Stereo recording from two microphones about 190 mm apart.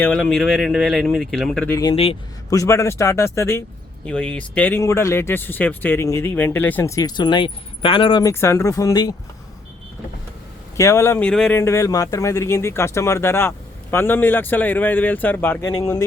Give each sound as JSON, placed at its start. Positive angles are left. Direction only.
{"t": 0.0, "sound": "speech", "side_deg": 5}
{"t": 1.7, "sound": "speech", "side_deg": 20}
{"t": 2.5, "sound": "speech", "side_deg": 15}
{"t": 8.3, "sound": "speech", "side_deg": 15}
{"t": 10.8, "sound": "speech", "side_deg": 15}